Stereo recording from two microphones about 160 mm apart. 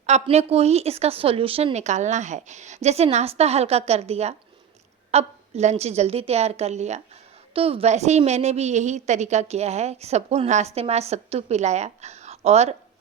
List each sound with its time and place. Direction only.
0.0 s a woman's voice: 45° right (ahead or behind)